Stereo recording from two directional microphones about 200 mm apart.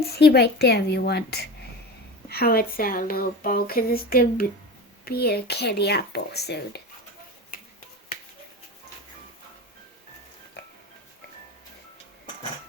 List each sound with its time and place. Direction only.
0.0 s speech: 55° left (ahead or behind)